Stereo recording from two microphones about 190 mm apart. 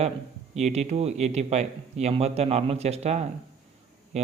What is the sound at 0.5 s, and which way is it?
Speech, 35° right (ahead or behind).